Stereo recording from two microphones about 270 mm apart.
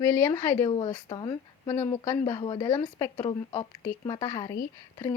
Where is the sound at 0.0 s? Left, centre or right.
Centre.